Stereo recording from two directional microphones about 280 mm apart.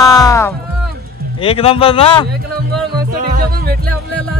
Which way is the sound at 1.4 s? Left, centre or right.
Left.